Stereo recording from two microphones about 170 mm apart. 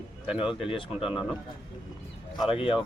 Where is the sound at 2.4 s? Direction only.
35° left (ahead or behind).